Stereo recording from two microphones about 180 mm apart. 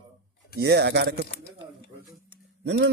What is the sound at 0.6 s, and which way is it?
Speech, 70° right (ahead or behind).